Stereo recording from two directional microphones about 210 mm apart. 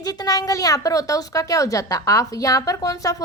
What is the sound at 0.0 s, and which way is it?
A woman's voice, 20° left (ahead or behind).